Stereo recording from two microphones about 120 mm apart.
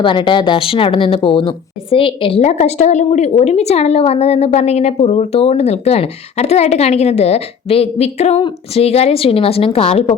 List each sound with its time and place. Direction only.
0.0 s speech: 40° left (ahead or behind); by 8.4 s 65° left (ahead or behind)
8.4 s speech: 50° left (ahead or behind)